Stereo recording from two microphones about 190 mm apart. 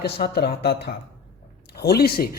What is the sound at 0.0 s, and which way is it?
Speech, 55° left (ahead or behind).